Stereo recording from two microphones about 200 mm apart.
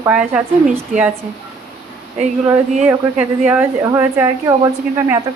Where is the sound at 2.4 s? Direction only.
10° right (ahead or behind).